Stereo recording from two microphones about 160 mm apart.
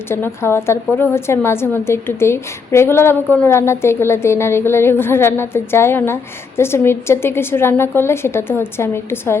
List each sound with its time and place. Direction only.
0.1 s a woman's voice: 15° left (ahead or behind)